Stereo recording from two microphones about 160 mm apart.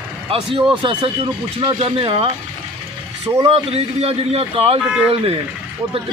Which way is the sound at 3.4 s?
40° right (ahead or behind).